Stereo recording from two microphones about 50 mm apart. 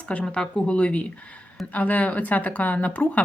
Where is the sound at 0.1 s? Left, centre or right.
Left.